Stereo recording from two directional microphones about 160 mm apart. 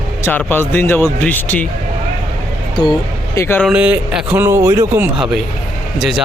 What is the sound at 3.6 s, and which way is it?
A man's voice, 5° right (ahead or behind).